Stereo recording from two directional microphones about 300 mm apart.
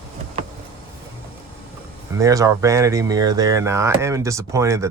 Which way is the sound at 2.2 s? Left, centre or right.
Centre.